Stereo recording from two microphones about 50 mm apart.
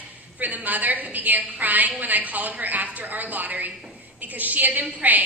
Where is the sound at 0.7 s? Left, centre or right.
Right.